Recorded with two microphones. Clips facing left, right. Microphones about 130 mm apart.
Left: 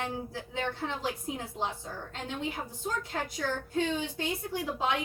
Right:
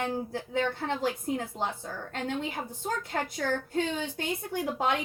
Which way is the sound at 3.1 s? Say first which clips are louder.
Right 5 dB; 50° right (ahead or behind).